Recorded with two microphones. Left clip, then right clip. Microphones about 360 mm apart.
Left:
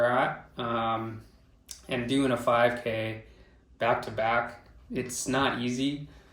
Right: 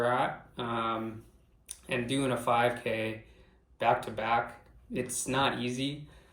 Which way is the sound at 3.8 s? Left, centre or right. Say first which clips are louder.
Left 1 dB; centre.